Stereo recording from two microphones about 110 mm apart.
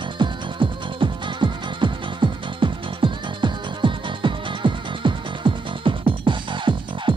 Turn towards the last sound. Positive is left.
turn(degrees=-45)  # may be behind; listen again after turning